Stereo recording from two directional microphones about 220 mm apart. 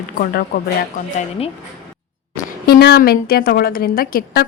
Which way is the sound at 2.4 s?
45° left (ahead or behind).